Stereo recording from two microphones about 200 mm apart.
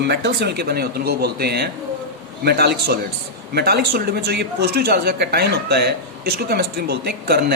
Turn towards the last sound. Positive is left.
turn(degrees=-55)  # may be behind; listen again after turning